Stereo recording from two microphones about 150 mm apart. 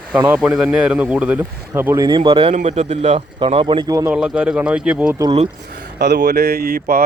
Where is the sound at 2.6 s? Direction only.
45° right (ahead or behind); by 4.1 s 25° right (ahead or behind).